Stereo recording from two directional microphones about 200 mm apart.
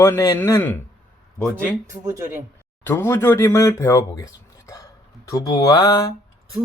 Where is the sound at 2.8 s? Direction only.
10° left (ahead or behind).